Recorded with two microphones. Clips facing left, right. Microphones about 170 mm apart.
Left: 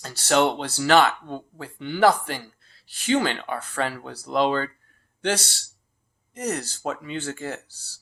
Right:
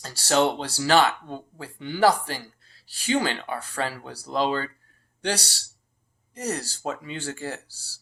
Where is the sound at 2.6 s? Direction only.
40° right (ahead or behind).